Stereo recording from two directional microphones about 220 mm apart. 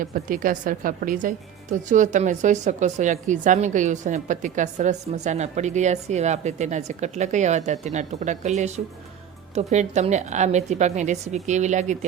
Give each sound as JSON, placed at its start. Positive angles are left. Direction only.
{"t": 0.0, "sound": "a woman's voice", "side_deg": -40}